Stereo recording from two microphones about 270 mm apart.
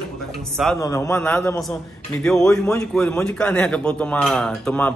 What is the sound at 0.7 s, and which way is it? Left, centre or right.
A man's voice, centre.